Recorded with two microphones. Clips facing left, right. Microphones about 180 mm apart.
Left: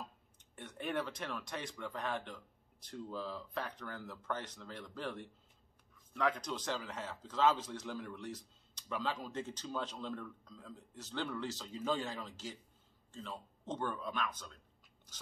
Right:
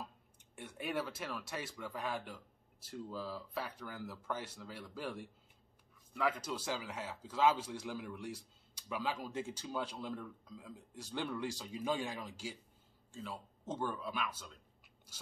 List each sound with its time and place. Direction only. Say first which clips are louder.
0.6 s speech: left 1 dB; 10° right (ahead or behind)
15.1 s biting: even; 10° right (ahead or behind)